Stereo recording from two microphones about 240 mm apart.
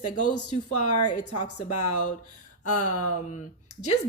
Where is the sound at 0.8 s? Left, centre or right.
Left.